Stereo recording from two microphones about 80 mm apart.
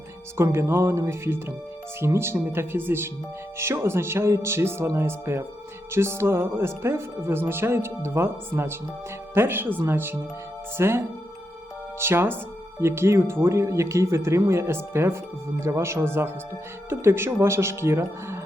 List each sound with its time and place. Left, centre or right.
0.3 s speech: right